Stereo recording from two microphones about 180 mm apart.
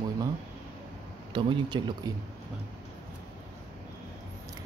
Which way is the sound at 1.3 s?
25° right (ahead or behind).